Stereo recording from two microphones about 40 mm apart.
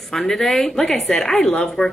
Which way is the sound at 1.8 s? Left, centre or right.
Left.